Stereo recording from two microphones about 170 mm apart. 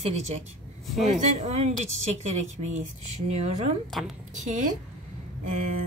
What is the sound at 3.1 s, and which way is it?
Speech, 40° right (ahead or behind).